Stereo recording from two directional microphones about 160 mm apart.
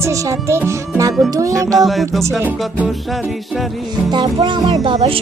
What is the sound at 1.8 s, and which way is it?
Music, centre (ahead or behind).